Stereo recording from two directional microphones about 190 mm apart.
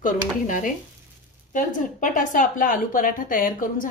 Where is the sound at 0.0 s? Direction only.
45° left (ahead or behind).